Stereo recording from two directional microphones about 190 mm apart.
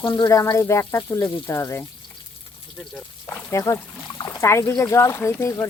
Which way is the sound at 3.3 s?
15° left (ahead or behind).